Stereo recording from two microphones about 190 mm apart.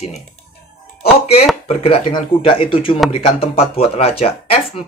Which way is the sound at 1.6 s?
30° left (ahead or behind).